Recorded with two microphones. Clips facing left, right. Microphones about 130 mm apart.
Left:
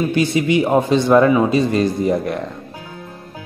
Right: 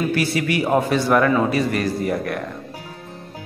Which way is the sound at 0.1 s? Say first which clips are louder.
Left 5 dB; 20° left (ahead or behind).